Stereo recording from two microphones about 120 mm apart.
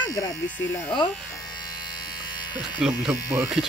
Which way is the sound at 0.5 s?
15° left (ahead or behind).